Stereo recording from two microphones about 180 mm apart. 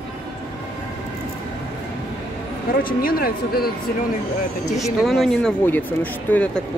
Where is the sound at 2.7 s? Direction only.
55° left (ahead or behind).